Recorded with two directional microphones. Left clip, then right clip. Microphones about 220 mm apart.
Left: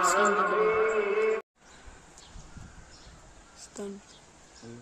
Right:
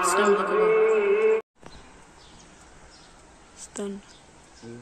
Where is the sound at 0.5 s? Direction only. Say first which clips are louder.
Right 5 dB; 50° left (ahead or behind).